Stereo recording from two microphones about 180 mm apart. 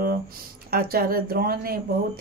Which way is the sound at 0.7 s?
55° right (ahead or behind).